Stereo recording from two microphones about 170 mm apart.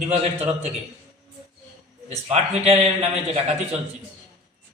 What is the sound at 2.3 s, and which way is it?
A man's voice, 40° right (ahead or behind).